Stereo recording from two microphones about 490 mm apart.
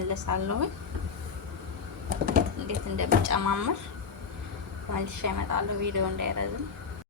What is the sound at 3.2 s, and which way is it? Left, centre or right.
Speech, right.